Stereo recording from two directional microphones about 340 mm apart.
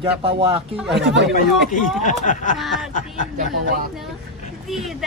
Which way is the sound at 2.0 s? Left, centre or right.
Left.